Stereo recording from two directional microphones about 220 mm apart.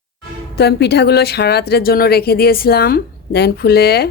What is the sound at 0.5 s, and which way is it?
A woman's voice, 50° left (ahead or behind).